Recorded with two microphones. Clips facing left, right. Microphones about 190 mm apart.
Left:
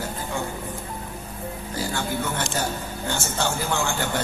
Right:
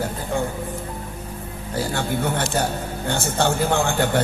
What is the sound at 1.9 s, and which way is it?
Speech, 60° right (ahead or behind).